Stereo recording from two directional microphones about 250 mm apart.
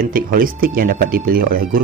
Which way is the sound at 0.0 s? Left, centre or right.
Right.